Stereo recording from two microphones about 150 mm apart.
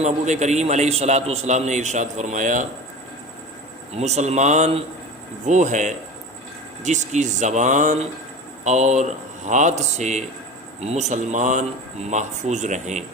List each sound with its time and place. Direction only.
0.0 s a man's voice: 50° right (ahead or behind)
3.9 s a man's voice: 45° right (ahead or behind)